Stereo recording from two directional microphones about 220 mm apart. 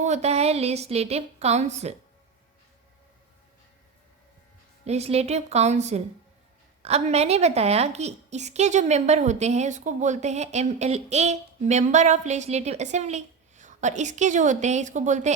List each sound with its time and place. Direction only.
0.0 s a woman's voice: 30° right (ahead or behind)
4.9 s a woman's voice: 30° right (ahead or behind)